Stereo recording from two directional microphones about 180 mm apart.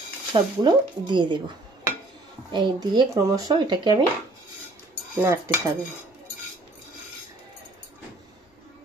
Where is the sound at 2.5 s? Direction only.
25° right (ahead or behind).